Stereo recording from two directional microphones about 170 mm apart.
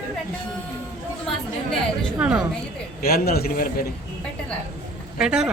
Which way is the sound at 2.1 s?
5° right (ahead or behind).